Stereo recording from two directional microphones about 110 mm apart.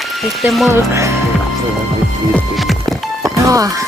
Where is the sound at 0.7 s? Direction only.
25° right (ahead or behind).